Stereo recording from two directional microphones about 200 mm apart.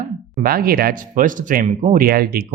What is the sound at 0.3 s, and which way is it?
Speech, 50° right (ahead or behind).